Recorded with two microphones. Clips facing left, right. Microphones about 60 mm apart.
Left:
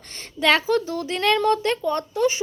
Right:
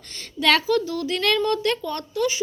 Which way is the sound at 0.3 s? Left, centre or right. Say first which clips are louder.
Even; left.